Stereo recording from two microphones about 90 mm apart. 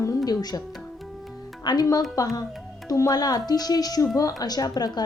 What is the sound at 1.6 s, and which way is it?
A woman's voice, 45° left (ahead or behind).